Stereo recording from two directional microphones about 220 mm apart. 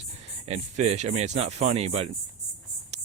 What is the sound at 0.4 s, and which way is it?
Speech, 30° right (ahead or behind).